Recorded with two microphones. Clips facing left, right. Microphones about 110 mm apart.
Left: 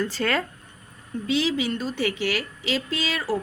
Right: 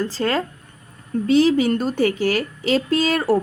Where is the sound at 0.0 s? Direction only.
30° right (ahead or behind).